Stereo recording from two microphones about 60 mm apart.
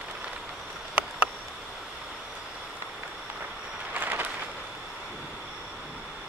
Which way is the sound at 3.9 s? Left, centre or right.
Right.